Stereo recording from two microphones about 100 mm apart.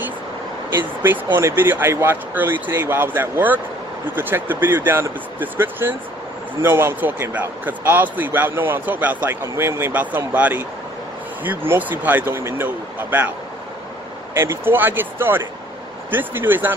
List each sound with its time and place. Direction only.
1.0 s speech: 25° right (ahead or behind)
14.3 s speech: 25° right (ahead or behind)